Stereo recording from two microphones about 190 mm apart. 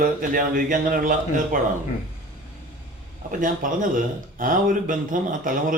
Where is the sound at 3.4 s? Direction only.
45° right (ahead or behind).